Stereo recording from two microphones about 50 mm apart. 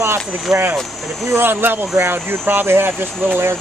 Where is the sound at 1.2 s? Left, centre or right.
Right.